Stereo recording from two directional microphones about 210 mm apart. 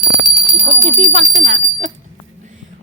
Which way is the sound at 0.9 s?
35° right (ahead or behind).